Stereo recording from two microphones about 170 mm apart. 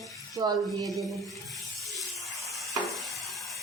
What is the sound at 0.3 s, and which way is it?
Speech, 20° right (ahead or behind).